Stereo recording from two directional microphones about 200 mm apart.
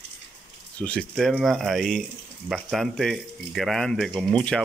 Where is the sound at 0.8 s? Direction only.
5° left (ahead or behind).